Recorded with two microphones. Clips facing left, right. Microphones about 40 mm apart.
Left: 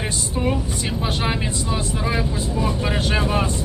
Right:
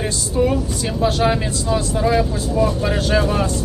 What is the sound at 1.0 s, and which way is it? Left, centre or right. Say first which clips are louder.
Speech: right 8 dB; centre.